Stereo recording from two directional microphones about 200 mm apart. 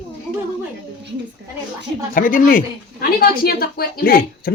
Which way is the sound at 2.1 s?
45° left (ahead or behind).